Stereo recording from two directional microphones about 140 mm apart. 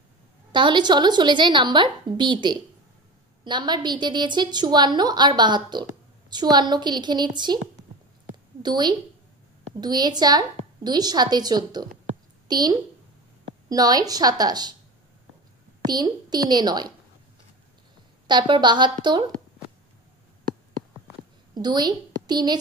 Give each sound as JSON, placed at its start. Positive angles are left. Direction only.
{"t": 0.5, "sound": "a woman's voice", "side_deg": -35}
{"t": 8.6, "sound": "a woman's voice", "side_deg": -30}
{"t": 15.9, "sound": "a woman's voice", "side_deg": -30}
{"t": 18.2, "sound": "a woman's voice", "side_deg": -35}
{"t": 20.4, "sound": "a sound", "side_deg": -85}
{"t": 21.5, "sound": "a woman's voice", "side_deg": -30}